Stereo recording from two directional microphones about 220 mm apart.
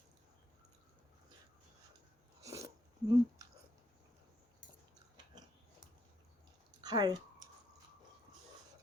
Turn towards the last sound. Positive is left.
turn(degrees=-20)  # may be behind; listen again after turning